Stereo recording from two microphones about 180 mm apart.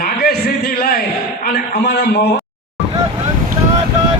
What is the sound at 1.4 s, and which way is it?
Speech, 55° left (ahead or behind).